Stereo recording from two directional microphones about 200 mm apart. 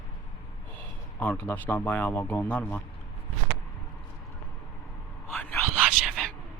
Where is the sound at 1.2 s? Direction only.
5° left (ahead or behind).